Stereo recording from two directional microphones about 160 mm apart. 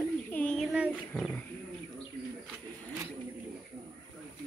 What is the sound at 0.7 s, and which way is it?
Speech, 5° right (ahead or behind).